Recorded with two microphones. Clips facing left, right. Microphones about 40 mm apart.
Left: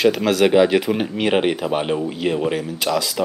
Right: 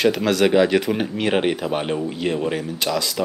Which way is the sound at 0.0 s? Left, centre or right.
Centre.